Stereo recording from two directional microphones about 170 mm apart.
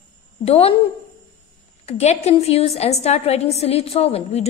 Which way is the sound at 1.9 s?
40° left (ahead or behind).